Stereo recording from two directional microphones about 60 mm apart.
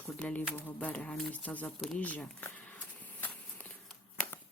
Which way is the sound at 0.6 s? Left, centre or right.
Left.